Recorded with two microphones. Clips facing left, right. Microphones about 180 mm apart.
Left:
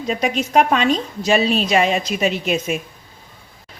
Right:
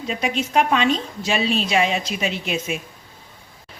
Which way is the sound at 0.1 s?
45° left (ahead or behind).